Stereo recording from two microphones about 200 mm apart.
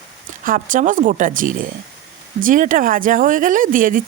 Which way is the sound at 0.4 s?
45° right (ahead or behind).